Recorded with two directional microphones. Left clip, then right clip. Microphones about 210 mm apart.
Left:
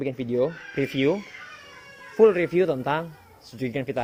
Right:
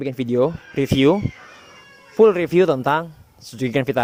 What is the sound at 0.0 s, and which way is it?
Speech, 50° right (ahead or behind).